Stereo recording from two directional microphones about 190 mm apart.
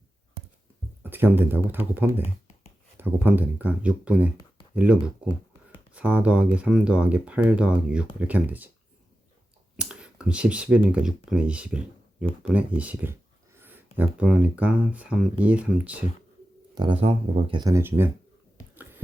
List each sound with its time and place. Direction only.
1.1 s speech: 10° right (ahead or behind)
9.7 s speech: 5° right (ahead or behind)
16.7 s speech: 25° right (ahead or behind)